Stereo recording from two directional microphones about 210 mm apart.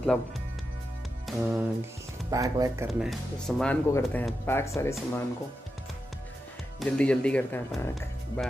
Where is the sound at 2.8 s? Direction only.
Centre (ahead or behind).